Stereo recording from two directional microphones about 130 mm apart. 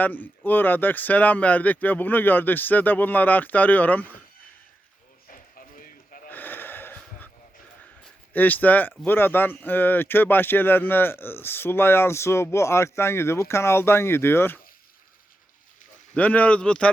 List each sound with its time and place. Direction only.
0.0 s speech: 15° left (ahead or behind)
5.3 s a sound: 90° left
6.3 s snort: 15° left (ahead or behind)
8.3 s speech: 15° left (ahead or behind)
16.1 s speech: 10° left (ahead or behind)